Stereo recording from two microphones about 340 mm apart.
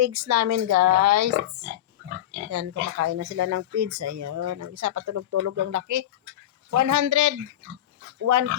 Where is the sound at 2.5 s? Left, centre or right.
Right.